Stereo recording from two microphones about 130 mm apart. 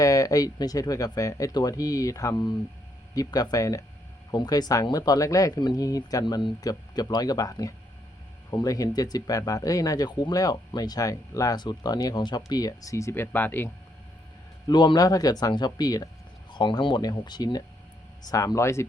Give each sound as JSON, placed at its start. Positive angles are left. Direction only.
{"t": 0.0, "sound": "speech", "side_deg": 25}
{"t": 14.7, "sound": "speech", "side_deg": 35}